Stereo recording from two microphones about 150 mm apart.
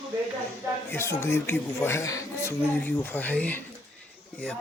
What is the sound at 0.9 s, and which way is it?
Speech, 15° left (ahead or behind).